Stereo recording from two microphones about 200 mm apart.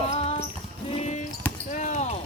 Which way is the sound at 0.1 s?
30° left (ahead or behind).